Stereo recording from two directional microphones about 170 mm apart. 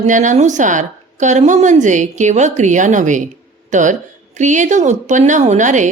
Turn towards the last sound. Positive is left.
turn(degrees=-45)  # may be behind; listen again after turning